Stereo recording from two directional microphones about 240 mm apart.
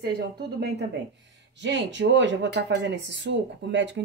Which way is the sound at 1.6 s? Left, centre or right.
Right.